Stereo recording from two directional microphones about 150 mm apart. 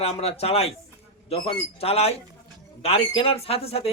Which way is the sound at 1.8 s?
40° left (ahead or behind).